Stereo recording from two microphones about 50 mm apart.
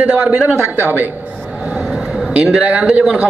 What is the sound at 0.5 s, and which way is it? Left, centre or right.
Speech, right.